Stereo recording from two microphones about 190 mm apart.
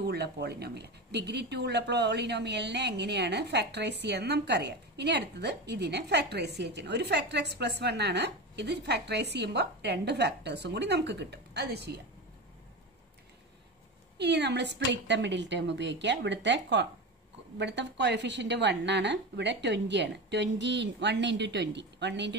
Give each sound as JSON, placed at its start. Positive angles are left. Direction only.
{"t": 0.0, "sound": "speech", "side_deg": -60}
{"t": 14.1, "sound": "a woman's voice", "side_deg": -60}